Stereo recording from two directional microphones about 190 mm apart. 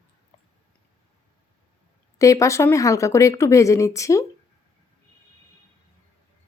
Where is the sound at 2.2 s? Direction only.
15° left (ahead or behind).